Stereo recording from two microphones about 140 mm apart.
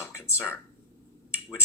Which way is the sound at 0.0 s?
20° left (ahead or behind).